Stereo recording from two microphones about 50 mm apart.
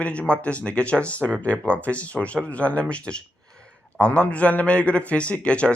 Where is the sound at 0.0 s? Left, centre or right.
Left.